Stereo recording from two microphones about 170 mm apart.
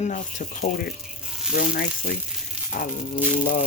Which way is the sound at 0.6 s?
65° left (ahead or behind).